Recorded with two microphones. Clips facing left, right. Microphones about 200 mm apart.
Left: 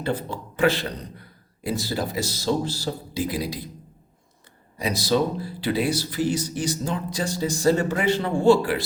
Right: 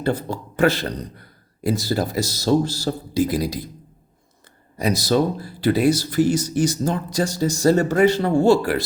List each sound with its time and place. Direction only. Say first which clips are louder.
0.0 s speech: right 4 dB; 40° right (ahead or behind)
4.8 s speech: right 3 dB; 45° right (ahead or behind)